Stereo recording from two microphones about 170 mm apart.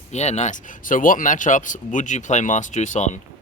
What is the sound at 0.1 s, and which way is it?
Speech, 40° left (ahead or behind).